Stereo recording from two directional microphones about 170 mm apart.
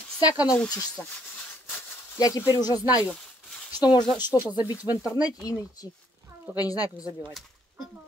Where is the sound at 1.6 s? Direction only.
15° left (ahead or behind).